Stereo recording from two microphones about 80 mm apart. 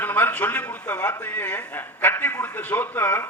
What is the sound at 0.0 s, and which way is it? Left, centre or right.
A man's voice, left.